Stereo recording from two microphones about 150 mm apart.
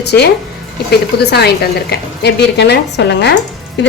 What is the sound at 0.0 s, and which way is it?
A woman's voice, 90° left.